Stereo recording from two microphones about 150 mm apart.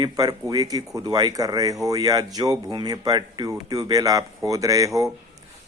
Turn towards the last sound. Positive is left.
turn(degrees=-20)  # may be behind; listen again after turning